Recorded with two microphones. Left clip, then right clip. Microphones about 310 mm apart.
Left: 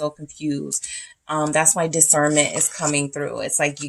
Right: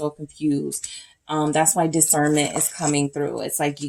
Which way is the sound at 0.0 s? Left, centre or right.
Left.